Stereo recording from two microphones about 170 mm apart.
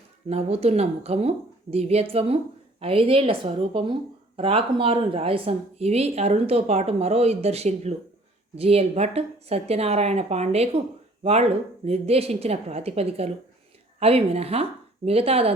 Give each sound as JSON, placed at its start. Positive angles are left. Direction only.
{"t": 0.3, "sound": "speech", "side_deg": -35}